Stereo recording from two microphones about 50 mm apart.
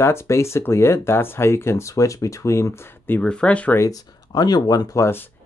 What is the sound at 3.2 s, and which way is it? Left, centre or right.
Speech, centre.